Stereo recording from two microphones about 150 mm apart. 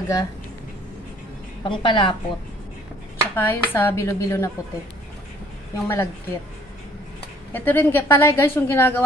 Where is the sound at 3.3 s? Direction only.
15° left (ahead or behind).